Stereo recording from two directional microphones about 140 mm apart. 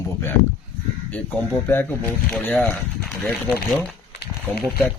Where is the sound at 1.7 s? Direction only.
15° left (ahead or behind).